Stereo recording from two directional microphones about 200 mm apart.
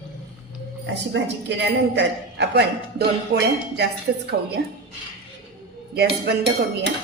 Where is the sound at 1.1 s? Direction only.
60° right (ahead or behind).